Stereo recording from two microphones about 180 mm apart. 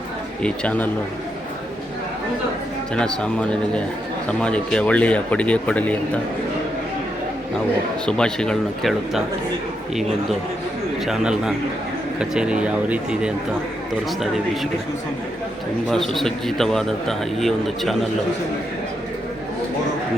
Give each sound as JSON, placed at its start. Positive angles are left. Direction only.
{"t": 0.4, "sound": "speech", "side_deg": 5}
{"t": 2.9, "sound": "a man's voice", "side_deg": 5}
{"t": 8.0, "sound": "a man's voice", "side_deg": 5}
{"t": 15.9, "sound": "a man's voice", "side_deg": 0}